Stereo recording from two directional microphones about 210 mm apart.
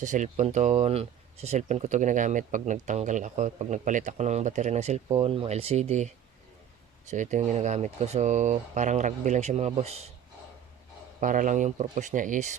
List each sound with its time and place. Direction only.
0.0 s speech: 35° right (ahead or behind)
7.1 s speech: 35° right (ahead or behind)
11.2 s speech: 40° right (ahead or behind)